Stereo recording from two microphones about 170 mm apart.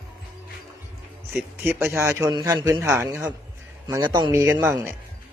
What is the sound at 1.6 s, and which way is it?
A man's voice, 15° right (ahead or behind).